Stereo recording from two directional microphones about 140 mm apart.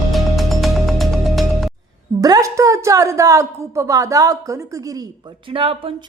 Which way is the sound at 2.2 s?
25° right (ahead or behind).